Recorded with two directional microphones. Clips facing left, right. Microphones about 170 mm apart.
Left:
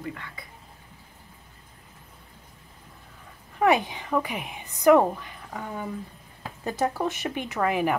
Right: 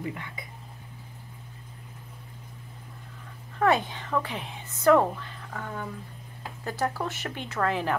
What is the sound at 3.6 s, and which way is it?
Speech, 10° left (ahead or behind).